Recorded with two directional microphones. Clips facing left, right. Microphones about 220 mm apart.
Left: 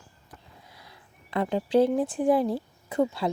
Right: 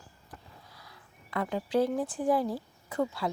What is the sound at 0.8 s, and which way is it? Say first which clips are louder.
Speech: left 2 dB; 25° left (ahead or behind).